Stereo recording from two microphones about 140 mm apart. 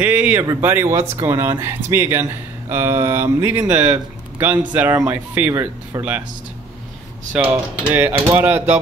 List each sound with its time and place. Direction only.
0.0 s speech: 15° right (ahead or behind)
7.3 s speech: 10° right (ahead or behind)